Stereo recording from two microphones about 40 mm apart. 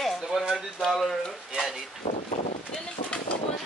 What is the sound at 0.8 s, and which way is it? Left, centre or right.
Speech, centre.